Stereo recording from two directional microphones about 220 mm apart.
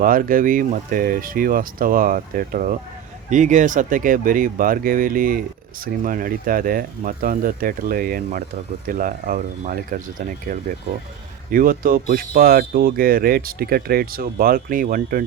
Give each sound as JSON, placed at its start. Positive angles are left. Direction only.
{"t": 0.0, "sound": "speech", "side_deg": -40}
{"t": 11.5, "sound": "speech", "side_deg": -40}